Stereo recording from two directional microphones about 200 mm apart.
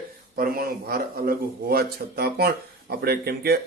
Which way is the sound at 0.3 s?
45° right (ahead or behind).